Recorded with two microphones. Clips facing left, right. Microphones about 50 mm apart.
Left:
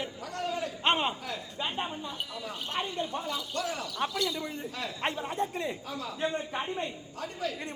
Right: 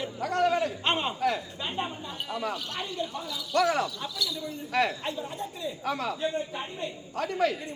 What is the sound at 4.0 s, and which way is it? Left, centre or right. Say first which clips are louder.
Speech: left 3 dB; left.